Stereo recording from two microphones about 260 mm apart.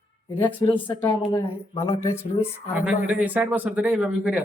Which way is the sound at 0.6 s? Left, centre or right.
Centre.